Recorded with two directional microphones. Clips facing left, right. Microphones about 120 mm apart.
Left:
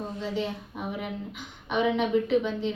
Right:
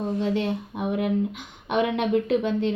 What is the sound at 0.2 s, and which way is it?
A woman's voice, 60° right (ahead or behind).